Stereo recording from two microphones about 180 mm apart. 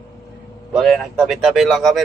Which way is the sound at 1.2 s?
Centre (ahead or behind).